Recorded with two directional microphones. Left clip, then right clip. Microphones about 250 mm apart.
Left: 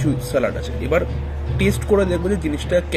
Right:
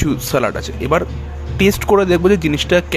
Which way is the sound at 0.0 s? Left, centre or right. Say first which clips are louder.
Right 3 dB; right.